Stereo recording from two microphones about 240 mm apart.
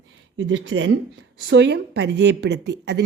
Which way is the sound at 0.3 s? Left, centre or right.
Right.